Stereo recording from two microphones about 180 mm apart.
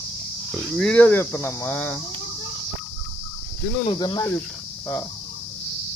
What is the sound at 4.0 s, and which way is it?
Speech, 20° left (ahead or behind).